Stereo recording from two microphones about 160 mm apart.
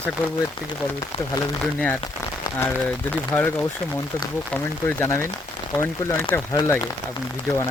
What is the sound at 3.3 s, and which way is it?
Speech, 10° left (ahead or behind).